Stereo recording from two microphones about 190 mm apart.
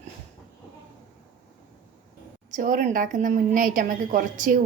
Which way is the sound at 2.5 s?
40° right (ahead or behind).